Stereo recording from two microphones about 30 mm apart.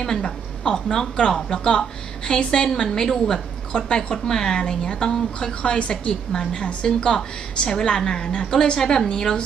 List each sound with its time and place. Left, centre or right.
0.2 s a woman's voice: left